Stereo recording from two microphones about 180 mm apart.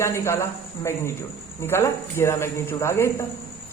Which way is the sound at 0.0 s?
15° left (ahead or behind).